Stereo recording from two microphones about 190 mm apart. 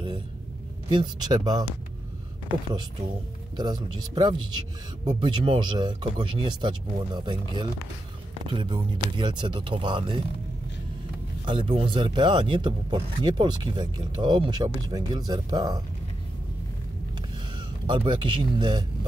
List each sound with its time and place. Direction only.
0.8 s speech: 25° right (ahead or behind)
3.5 s speech: 20° right (ahead or behind)
11.4 s speech: 25° right (ahead or behind)
17.6 s speech: 25° right (ahead or behind)